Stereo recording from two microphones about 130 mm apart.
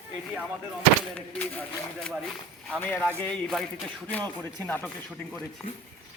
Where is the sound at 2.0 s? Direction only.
5° left (ahead or behind).